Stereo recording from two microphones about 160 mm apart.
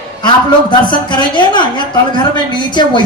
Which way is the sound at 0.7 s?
30° left (ahead or behind).